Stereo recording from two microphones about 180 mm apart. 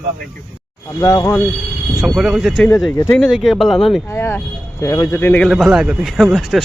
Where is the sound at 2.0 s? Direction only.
Centre (ahead or behind).